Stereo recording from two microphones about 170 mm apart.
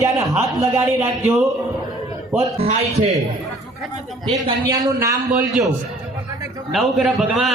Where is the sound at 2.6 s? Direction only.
40° right (ahead or behind).